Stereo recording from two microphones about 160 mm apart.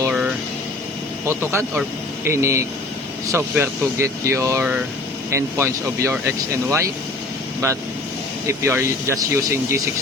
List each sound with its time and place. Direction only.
0.1 s air conditioning: 5° right (ahead or behind)
1.3 s speech: 15° right (ahead or behind)
8.4 s speech: 15° right (ahead or behind)